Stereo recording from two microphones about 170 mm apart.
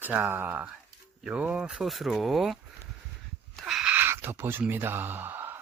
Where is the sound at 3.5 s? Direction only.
Centre (ahead or behind).